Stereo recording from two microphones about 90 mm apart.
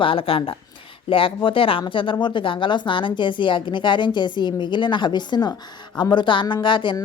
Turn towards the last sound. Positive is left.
turn(degrees=60)  # may be behind; listen again after turning